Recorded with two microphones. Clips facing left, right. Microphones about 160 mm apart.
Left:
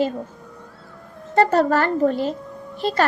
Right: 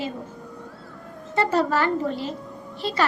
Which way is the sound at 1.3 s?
45° left (ahead or behind).